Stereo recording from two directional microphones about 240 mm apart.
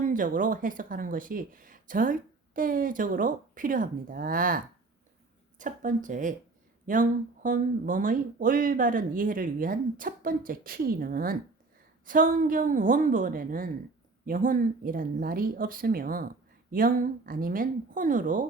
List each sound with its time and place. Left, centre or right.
0.0 s speech: right